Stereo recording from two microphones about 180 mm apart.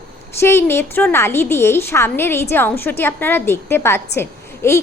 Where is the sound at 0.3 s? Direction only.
15° left (ahead or behind).